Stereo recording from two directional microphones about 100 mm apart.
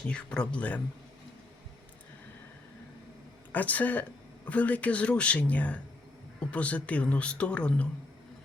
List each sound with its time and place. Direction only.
0.1 s speech: 10° left (ahead or behind)
3.5 s speech: 15° left (ahead or behind)